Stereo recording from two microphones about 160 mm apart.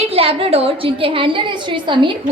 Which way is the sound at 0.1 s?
35° right (ahead or behind).